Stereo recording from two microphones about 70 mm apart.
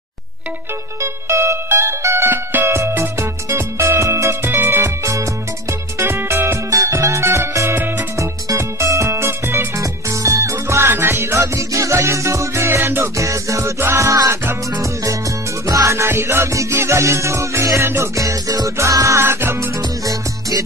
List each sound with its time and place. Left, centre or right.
1.0 s music: right
4.5 s music: right
6.7 s music: right
9.8 s music: right
12.6 s music: right
13.2 s music: right
15.6 s music: right
20.1 s music: right